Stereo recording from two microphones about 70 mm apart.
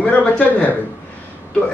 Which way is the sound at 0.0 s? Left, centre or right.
Centre.